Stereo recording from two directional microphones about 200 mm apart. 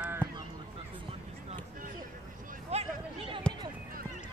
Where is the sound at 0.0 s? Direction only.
10° right (ahead or behind).